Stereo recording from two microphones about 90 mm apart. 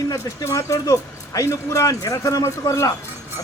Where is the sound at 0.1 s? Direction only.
40° left (ahead or behind).